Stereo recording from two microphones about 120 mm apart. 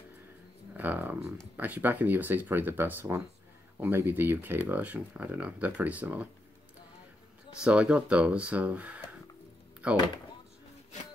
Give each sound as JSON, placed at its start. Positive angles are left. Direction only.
{"t": 0.7, "sound": "speech", "side_deg": -15}
{"t": 7.6, "sound": "speech", "side_deg": -10}